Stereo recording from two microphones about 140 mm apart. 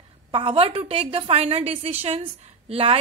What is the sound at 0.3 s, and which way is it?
A woman's voice, 40° right (ahead or behind).